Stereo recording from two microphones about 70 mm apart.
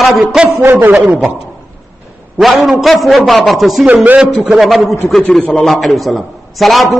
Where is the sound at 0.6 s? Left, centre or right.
Right.